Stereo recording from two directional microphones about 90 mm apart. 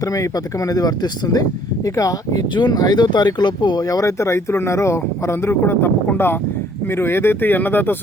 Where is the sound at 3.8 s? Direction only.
40° left (ahead or behind).